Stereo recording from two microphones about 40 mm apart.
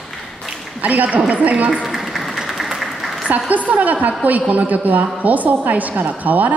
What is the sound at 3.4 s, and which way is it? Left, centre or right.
A woman's voice, right.